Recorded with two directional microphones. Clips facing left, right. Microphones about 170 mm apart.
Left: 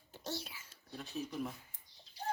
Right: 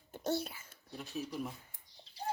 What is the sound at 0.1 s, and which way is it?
Babbling, 55° right (ahead or behind).